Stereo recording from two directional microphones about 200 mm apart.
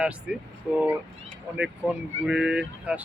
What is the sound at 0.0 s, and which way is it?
Speech, 5° right (ahead or behind).